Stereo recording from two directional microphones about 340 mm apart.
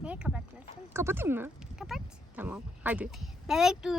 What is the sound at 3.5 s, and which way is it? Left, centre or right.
Speech, centre.